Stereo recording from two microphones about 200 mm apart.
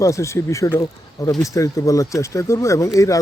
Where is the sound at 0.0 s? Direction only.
15° left (ahead or behind).